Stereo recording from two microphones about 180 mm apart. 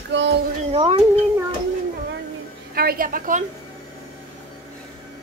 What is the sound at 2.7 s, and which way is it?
Speech, 55° right (ahead or behind).